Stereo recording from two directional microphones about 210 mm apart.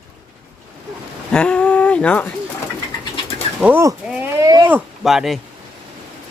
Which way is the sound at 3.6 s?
10° right (ahead or behind).